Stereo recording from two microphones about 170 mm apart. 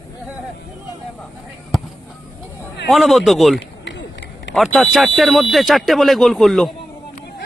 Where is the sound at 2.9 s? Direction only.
Centre (ahead or behind).